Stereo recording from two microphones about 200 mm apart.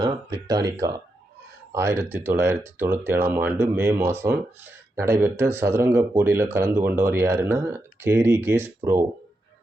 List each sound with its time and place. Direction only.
0.0 s speech: 20° right (ahead or behind)